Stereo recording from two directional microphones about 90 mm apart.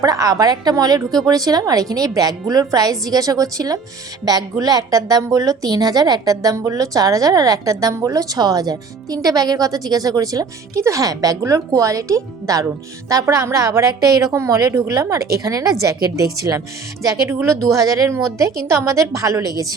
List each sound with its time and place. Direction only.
0.0 s a woman's voice: 40° right (ahead or behind)